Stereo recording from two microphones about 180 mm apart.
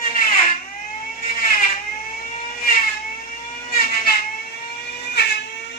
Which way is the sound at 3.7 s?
55° left (ahead or behind).